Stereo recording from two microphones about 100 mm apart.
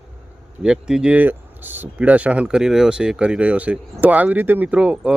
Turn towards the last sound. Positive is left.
turn(degrees=-10)  # may be behind; listen again after turning